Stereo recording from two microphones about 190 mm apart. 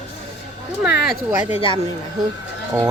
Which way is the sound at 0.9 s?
55° left (ahead or behind).